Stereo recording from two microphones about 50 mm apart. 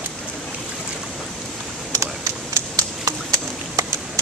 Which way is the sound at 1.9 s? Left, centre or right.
Right.